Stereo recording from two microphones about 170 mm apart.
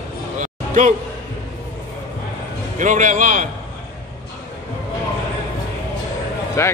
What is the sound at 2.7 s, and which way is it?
Speech, 50° right (ahead or behind).